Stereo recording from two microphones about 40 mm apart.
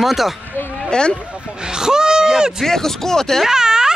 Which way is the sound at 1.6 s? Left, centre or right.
Centre.